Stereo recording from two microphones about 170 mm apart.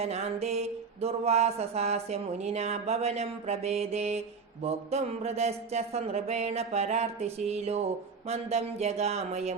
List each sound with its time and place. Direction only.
0.0 s music: 40° right (ahead or behind)